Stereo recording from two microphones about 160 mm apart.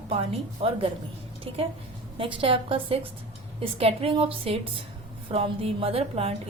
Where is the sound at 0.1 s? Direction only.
35° right (ahead or behind).